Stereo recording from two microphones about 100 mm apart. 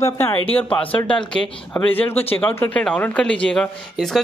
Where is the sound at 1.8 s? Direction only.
20° left (ahead or behind).